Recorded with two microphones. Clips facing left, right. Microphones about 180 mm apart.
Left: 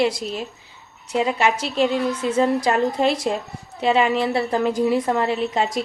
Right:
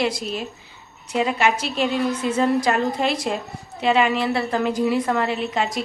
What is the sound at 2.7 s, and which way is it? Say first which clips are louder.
A woman's voice: left 2 dB; 25° left (ahead or behind).